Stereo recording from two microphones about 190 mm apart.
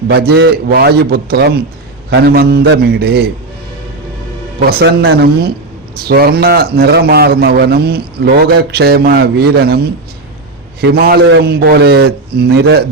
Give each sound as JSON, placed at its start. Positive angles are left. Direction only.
{"t": 0.1, "sound": "a man's voice", "side_deg": -55}
{"t": 4.6, "sound": "a man's voice", "side_deg": -60}